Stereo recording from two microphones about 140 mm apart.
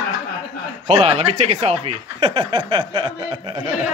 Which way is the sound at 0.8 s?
50° right (ahead or behind).